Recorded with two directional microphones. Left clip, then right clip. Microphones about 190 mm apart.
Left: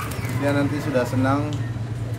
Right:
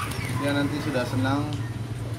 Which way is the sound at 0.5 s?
20° left (ahead or behind).